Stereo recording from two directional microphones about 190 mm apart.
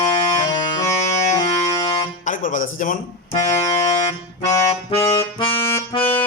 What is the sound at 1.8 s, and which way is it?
Music, 40° left (ahead or behind).